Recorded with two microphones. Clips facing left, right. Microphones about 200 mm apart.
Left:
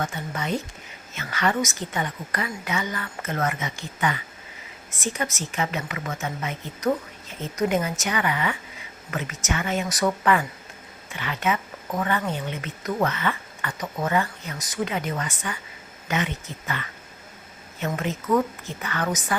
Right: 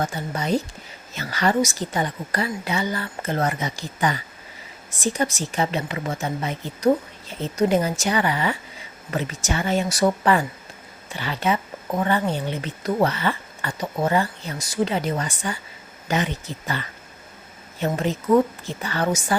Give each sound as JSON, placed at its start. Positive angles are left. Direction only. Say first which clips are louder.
{"t": 0.0, "sound": "speech", "louder": "right 3 dB", "side_deg": -35}